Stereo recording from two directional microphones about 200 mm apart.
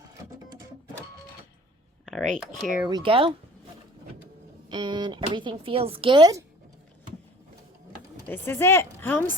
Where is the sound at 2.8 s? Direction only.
25° right (ahead or behind).